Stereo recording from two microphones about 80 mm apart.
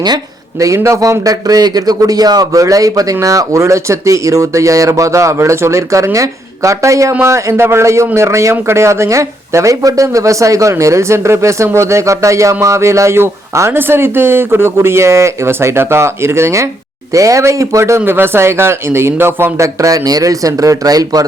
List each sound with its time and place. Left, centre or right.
0.6 s speech: right
18.0 s speech: right